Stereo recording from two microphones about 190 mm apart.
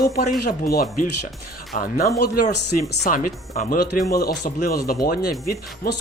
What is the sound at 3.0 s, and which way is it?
A man's voice, 45° left (ahead or behind).